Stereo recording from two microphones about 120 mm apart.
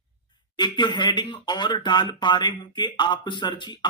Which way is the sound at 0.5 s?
40° left (ahead or behind).